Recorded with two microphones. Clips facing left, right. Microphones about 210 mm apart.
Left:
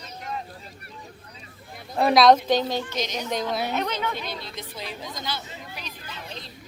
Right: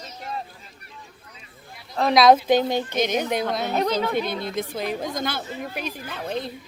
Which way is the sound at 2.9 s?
55° right (ahead or behind).